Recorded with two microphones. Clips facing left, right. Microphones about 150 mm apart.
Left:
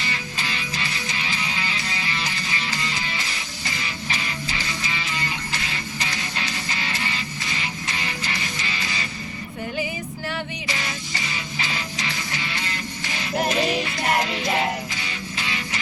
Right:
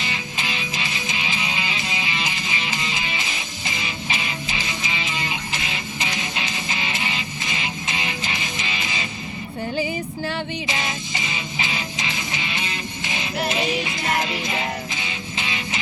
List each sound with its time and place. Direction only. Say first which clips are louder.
0.0 s music: right 1 dB; 20° right (ahead or behind)
10.2 s music: right 1 dB; 20° right (ahead or behind)